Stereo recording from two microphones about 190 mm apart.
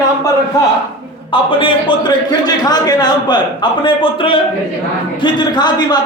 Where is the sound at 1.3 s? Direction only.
25° left (ahead or behind).